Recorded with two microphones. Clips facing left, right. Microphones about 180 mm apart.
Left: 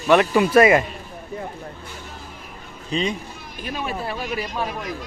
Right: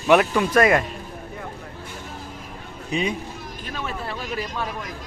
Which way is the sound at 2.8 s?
10° right (ahead or behind).